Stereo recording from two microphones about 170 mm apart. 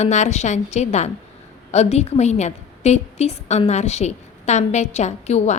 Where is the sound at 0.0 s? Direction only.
45° left (ahead or behind).